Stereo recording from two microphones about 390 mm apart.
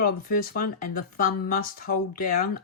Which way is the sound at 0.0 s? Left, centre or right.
Left.